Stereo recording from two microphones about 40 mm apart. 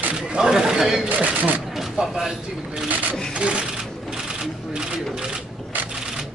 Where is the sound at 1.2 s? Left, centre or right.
Right.